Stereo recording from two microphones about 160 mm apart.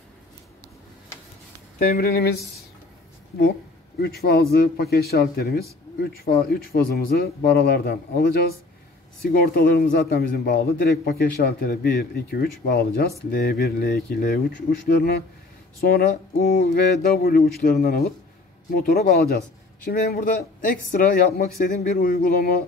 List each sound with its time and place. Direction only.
1.8 s a man's voice: 70° left (ahead or behind)
4.0 s a man's voice: 75° left (ahead or behind)